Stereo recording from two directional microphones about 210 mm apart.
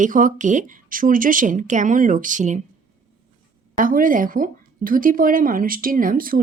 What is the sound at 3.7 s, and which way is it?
Speech, 40° right (ahead or behind).